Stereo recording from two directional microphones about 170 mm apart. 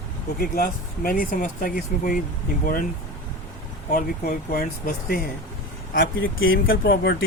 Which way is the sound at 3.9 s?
55° left (ahead or behind).